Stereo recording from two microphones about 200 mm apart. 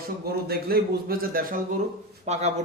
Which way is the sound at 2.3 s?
35° right (ahead or behind).